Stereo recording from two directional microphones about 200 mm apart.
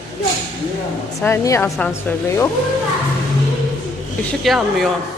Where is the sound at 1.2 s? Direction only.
15° left (ahead or behind).